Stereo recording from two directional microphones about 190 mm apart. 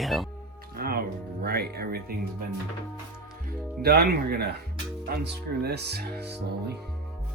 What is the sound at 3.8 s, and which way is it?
Speech, 55° right (ahead or behind).